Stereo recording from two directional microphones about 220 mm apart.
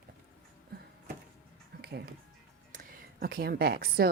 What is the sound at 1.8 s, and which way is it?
Speech, 45° right (ahead or behind).